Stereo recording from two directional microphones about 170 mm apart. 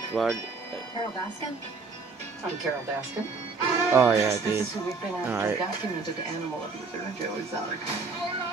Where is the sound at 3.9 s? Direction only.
15° right (ahead or behind).